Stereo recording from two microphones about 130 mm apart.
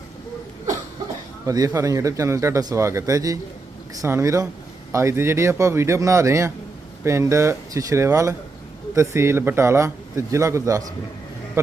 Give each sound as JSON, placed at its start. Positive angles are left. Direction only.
{"t": 1.5, "sound": "a man's voice", "side_deg": -25}